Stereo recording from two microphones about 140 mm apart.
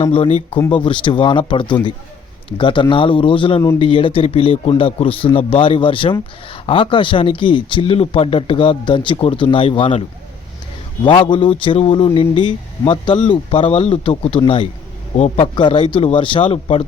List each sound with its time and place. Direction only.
0.0 s a man's voice: 40° left (ahead or behind)
11.0 s a man's voice: 35° left (ahead or behind)